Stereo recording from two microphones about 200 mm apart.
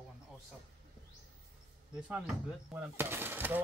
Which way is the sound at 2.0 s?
5° right (ahead or behind).